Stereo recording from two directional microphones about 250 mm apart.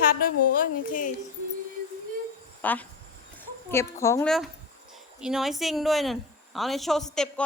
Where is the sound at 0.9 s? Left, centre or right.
Left.